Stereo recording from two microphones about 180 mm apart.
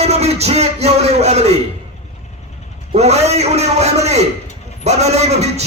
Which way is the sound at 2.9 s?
35° right (ahead or behind).